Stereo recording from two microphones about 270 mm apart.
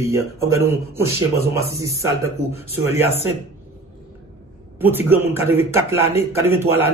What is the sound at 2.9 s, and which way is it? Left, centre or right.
Speech, left.